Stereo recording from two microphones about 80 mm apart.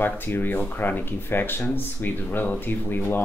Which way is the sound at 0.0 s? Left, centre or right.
Left.